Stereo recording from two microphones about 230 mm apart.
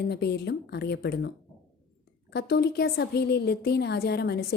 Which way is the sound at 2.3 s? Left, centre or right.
Left.